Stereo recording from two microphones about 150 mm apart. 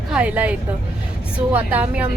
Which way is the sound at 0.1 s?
10° right (ahead or behind).